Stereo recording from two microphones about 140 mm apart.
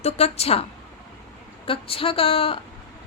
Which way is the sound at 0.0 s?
50° left (ahead or behind).